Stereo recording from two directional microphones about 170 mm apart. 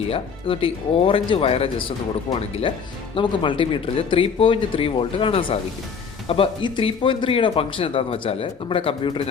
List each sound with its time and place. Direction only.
0.1 s speech: 35° left (ahead or behind)